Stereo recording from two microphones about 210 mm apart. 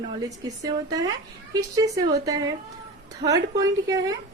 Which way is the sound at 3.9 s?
15° right (ahead or behind).